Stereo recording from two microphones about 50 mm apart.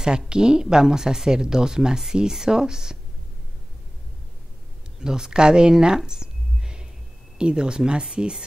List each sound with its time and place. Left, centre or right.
0.3 s speech: centre
5.0 s speech: centre